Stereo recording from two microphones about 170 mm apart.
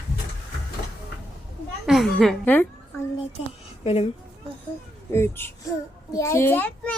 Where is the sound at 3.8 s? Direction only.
35° left (ahead or behind).